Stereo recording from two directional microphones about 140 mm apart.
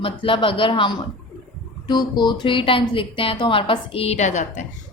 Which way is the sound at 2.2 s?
30° left (ahead or behind).